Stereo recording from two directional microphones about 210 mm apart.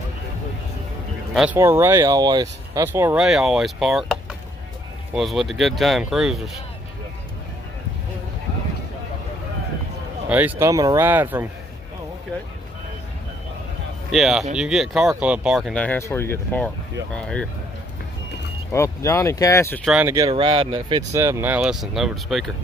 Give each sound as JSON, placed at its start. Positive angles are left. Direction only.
{"t": 1.3, "sound": "speech", "side_deg": -5}
{"t": 10.2, "sound": "speech", "side_deg": -10}
{"t": 14.1, "sound": "speech", "side_deg": 0}
{"t": 18.7, "sound": "speech", "side_deg": 15}
{"t": 19.8, "sound": "speech", "side_deg": 0}
{"t": 20.1, "sound": "speech", "side_deg": -20}
{"t": 21.1, "sound": "speech", "side_deg": -10}